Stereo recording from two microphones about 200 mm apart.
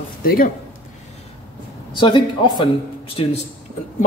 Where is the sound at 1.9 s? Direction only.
25° left (ahead or behind).